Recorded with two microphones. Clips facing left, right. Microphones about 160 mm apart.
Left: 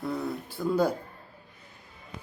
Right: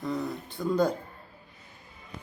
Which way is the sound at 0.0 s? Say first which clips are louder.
Even; 5° left (ahead or behind).